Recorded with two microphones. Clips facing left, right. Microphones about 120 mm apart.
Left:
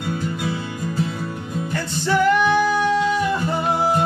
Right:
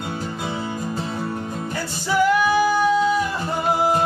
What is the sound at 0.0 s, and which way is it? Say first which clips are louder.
Music: left 3 dB; 25° right (ahead or behind).